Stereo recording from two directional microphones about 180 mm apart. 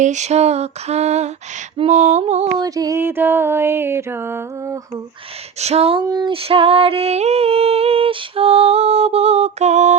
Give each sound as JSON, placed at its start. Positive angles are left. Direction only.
{"t": 0.0, "sound": "female singing", "side_deg": -40}
{"t": 2.6, "sound": "music", "side_deg": -20}
{"t": 5.5, "sound": "female singing", "side_deg": -35}
{"t": 6.1, "sound": "female singing", "side_deg": -25}